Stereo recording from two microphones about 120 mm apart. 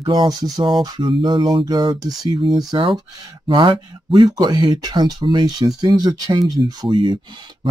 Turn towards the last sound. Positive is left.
turn(degrees=-40)  # may be behind; listen again after turning